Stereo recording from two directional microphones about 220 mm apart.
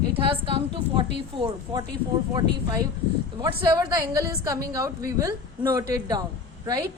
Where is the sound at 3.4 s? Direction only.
20° right (ahead or behind).